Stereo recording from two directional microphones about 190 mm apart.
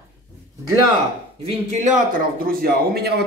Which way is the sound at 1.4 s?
35° right (ahead or behind).